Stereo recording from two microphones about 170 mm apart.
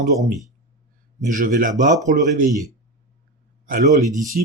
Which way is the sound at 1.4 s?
50° right (ahead or behind).